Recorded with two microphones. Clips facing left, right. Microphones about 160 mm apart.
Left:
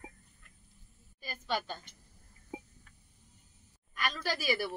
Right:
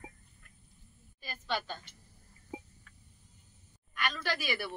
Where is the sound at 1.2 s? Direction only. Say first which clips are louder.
Left 1 dB; 10° left (ahead or behind).